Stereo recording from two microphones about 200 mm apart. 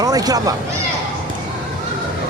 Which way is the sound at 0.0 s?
20° right (ahead or behind).